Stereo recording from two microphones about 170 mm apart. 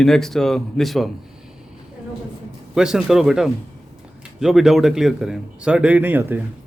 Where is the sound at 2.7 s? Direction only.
5° right (ahead or behind).